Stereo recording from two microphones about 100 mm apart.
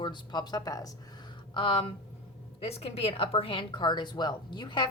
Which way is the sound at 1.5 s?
60° left (ahead or behind).